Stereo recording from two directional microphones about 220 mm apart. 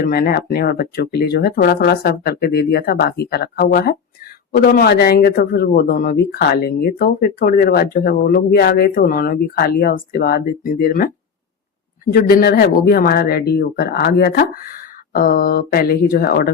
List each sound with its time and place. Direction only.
0.0 s speech: 45° left (ahead or behind)
12.1 s speech: 45° left (ahead or behind)